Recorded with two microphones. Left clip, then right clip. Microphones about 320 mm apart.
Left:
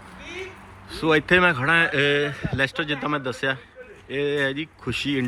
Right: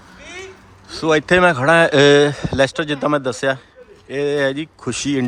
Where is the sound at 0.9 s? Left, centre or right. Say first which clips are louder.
Right 4 dB; centre.